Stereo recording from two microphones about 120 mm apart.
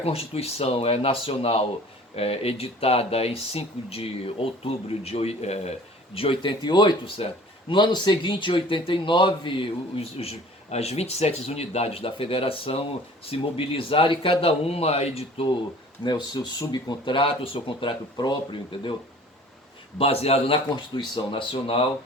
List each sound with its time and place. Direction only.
0.0 s speech: 55° left (ahead or behind)
6.1 s speech: 50° left (ahead or behind)
16.0 s speech: 35° left (ahead or behind)
20.0 s speech: 55° left (ahead or behind)